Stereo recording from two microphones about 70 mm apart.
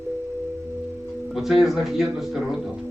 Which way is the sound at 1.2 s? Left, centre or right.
Centre.